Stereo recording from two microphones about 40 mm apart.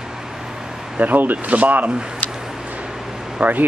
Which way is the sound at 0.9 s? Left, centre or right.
Right.